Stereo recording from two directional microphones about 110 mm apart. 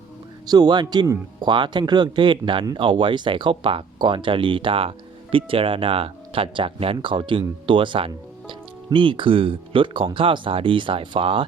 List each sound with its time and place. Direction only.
0.4 s a man's voice: 35° right (ahead or behind); by 11.4 s 55° right (ahead or behind)